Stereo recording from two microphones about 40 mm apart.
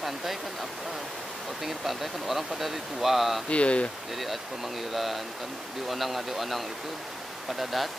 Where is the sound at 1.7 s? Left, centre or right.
Centre.